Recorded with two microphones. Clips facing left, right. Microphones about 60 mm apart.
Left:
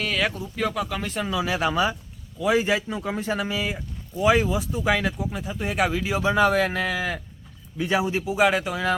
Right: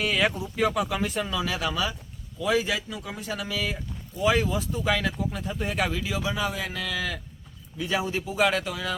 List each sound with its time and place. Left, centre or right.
0.0 s a sound: centre
0.5 s speech: centre
1.3 s speech: centre
1.5 s speech: left; by 5.8 s centre
5.8 s speech: left
6.2 s speech: left
6.7 s speech: left; by 8.7 s centre
8.7 s speech: left